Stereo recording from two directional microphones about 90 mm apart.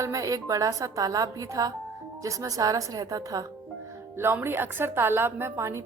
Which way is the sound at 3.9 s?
30° right (ahead or behind).